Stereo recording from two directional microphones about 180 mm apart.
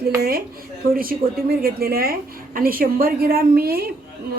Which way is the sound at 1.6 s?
55° right (ahead or behind).